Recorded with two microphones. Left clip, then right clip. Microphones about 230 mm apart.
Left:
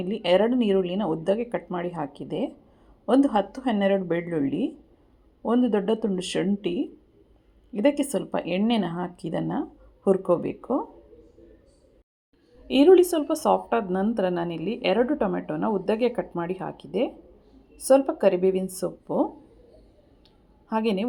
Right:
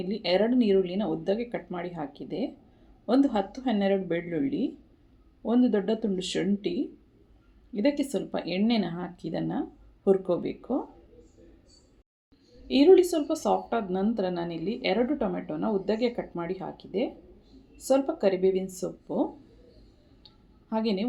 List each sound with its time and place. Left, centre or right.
0.1 s speech: centre
12.6 s speech: centre
20.2 s a sound: left